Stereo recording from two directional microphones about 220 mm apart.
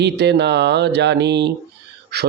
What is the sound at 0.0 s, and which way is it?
A man's voice, 50° right (ahead or behind).